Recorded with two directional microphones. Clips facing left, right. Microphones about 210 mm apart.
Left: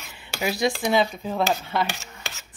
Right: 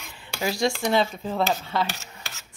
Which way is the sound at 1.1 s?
Centre (ahead or behind).